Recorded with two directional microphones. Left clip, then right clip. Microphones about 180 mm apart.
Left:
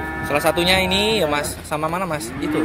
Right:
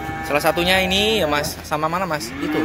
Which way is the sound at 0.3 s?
Centre (ahead or behind).